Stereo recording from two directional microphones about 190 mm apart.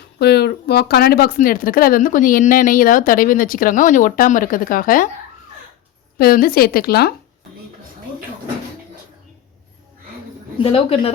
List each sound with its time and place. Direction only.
0.2 s speech: 60° left (ahead or behind)
6.1 s speech: 50° left (ahead or behind)
10.6 s a woman's voice: 30° left (ahead or behind)